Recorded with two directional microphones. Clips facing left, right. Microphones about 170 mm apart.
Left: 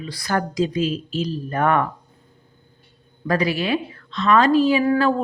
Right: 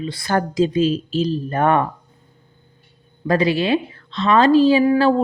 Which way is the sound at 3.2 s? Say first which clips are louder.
Right 4 dB; 25° right (ahead or behind).